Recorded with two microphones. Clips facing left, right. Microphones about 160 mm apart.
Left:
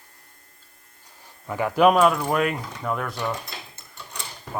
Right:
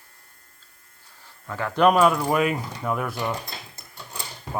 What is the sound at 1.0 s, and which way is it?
Speech, 15° left (ahead or behind).